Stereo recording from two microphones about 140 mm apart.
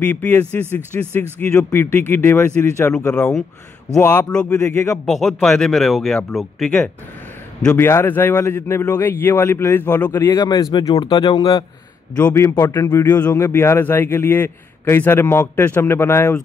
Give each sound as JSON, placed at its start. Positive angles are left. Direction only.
{"t": 0.0, "sound": "a man's voice", "side_deg": 10}
{"t": 3.9, "sound": "a man's voice", "side_deg": 20}
{"t": 5.0, "sound": "speech", "side_deg": 0}
{"t": 7.6, "sound": "a man's voice", "side_deg": 15}
{"t": 10.9, "sound": "speech", "side_deg": 40}
{"t": 12.2, "sound": "a man's voice", "side_deg": 15}